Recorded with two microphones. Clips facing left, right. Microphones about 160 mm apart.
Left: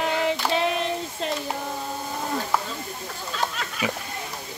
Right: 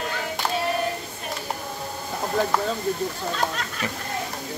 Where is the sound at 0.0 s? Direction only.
90° left.